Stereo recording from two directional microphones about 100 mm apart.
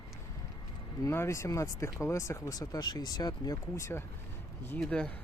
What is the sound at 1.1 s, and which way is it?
Speech, 25° left (ahead or behind).